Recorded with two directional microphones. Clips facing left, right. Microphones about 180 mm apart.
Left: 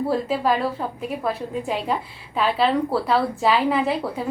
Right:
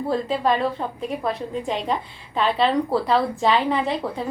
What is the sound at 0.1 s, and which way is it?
A woman's voice, 5° left (ahead or behind).